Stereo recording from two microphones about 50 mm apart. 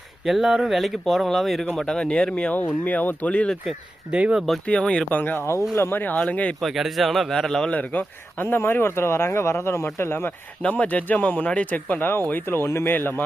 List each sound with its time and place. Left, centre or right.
0.3 s speech: centre
2.8 s speech: left
4.1 s speech: right
4.6 s speech: centre
5.1 s speech: left
5.7 s speech: left
6.0 s speech: left
6.6 s speech: centre
7.7 s speech: left
8.4 s speech: left
9.8 s speech: left
10.6 s speech: left
12.3 s speech: left
12.9 s speech: left